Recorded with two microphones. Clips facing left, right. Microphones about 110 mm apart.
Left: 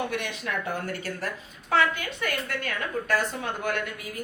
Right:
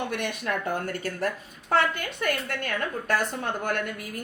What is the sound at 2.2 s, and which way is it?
A woman's voice, 50° right (ahead or behind).